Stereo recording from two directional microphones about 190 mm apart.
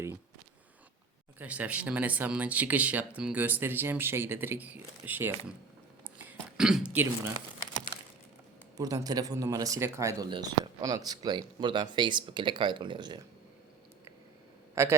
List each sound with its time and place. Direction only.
1.4 s speech: 5° right (ahead or behind)
6.2 s throat clearing: 5° right (ahead or behind)
8.8 s speech: 20° right (ahead or behind)
14.8 s speech: 15° right (ahead or behind)